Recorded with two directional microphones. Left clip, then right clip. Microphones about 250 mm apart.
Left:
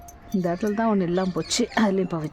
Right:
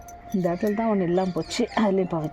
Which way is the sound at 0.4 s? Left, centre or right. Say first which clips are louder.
Even; centre.